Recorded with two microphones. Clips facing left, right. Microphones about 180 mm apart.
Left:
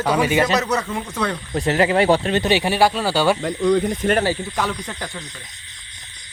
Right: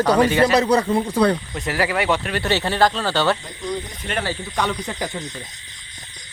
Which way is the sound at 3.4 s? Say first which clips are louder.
Left 10 dB; 75° left (ahead or behind).